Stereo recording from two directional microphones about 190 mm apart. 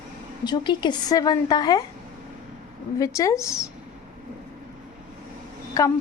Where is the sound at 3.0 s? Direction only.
15° left (ahead or behind).